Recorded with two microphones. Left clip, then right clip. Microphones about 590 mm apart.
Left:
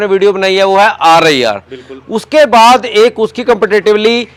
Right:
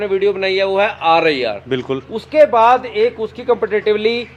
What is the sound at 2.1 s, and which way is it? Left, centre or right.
Speech, left.